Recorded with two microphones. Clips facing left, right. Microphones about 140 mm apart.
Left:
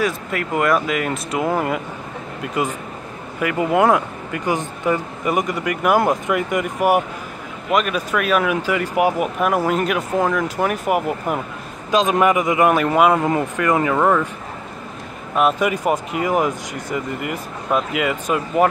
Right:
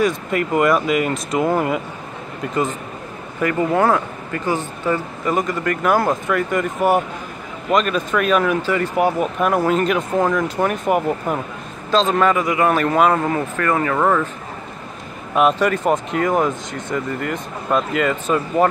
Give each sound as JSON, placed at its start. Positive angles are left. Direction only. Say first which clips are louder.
{"t": 0.0, "sound": "speech", "louder": "right 3 dB", "side_deg": 0}
{"t": 13.9, "sound": "speech", "louder": "left 1 dB", "side_deg": 5}
{"t": 15.3, "sound": "speech", "louder": "right 2 dB", "side_deg": 5}